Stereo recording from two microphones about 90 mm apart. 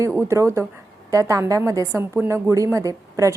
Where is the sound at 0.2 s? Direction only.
30° right (ahead or behind).